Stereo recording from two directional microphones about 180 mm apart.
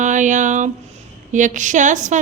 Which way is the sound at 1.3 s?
45° right (ahead or behind).